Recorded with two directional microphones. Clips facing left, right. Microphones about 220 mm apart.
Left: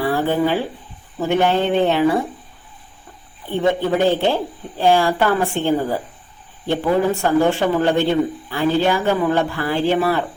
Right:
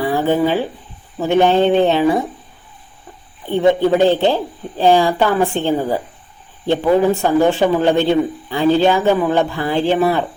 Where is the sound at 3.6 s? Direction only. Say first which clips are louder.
Right 4 dB; 20° right (ahead or behind).